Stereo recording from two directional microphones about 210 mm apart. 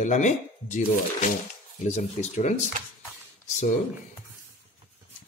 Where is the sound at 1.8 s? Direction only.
35° left (ahead or behind).